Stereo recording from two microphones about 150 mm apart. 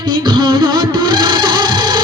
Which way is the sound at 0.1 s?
30° right (ahead or behind).